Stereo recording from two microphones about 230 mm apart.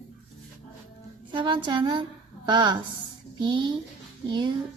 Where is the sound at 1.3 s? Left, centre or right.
Right.